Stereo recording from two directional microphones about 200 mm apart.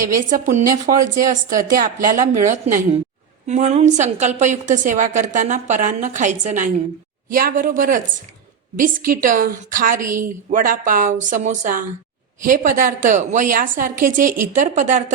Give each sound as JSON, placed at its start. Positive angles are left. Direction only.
{"t": 0.3, "sound": "a woman's voice", "side_deg": -40}